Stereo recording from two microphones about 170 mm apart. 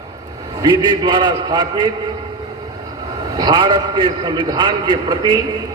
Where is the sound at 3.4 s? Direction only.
25° right (ahead or behind).